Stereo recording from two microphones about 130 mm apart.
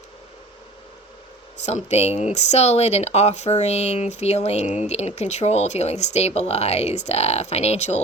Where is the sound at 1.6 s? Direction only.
55° left (ahead or behind).